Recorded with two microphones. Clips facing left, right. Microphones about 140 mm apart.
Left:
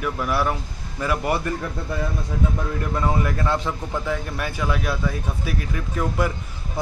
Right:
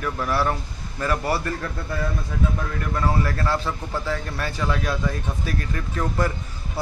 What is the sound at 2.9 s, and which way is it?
A man's voice, 20° left (ahead or behind).